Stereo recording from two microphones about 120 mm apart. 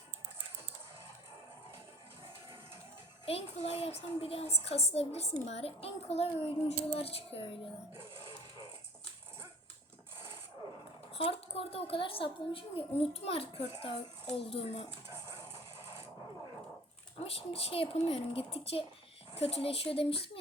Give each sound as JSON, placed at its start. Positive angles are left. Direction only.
{"t": 3.2, "sound": "speech", "side_deg": 60}
{"t": 11.1, "sound": "a woman's voice", "side_deg": 55}
{"t": 17.2, "sound": "a woman's voice", "side_deg": 55}